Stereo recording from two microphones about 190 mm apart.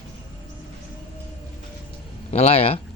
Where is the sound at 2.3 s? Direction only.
35° left (ahead or behind).